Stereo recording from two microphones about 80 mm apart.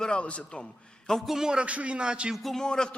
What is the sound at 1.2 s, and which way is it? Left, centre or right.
Music, centre.